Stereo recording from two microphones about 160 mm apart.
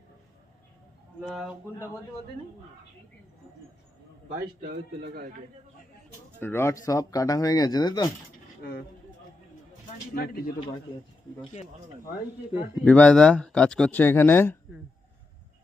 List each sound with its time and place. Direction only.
1.2 s speech: centre (ahead or behind)
6.4 s speech: 15° left (ahead or behind)
10.2 s speech: 75° left (ahead or behind)
12.8 s speech: 10° left (ahead or behind)